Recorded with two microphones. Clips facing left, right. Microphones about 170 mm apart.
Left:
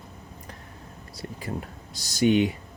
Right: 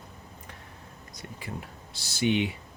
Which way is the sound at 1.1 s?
40° left (ahead or behind).